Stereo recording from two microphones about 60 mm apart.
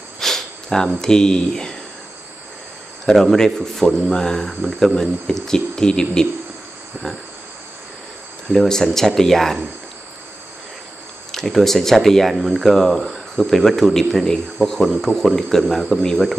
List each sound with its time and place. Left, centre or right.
0.2 s a sound: centre
3.1 s speech: centre
8.5 s speech: centre
11.3 s speech: centre